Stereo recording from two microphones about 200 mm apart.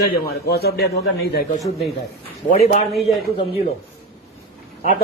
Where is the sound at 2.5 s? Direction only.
40° left (ahead or behind).